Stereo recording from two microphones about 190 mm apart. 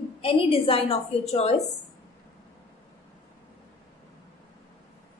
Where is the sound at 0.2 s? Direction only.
30° left (ahead or behind).